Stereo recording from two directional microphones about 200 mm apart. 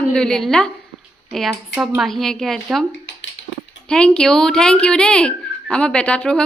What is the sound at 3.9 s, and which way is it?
Speech, 5° left (ahead or behind).